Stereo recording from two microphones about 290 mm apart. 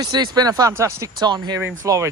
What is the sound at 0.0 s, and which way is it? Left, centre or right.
Speech, centre.